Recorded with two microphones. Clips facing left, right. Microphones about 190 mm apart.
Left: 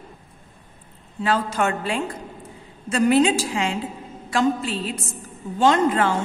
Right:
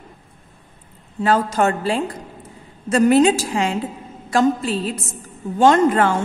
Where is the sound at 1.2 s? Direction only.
40° right (ahead or behind).